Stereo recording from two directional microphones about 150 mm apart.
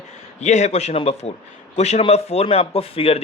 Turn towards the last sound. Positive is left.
turn(degrees=40)  # may be behind; listen again after turning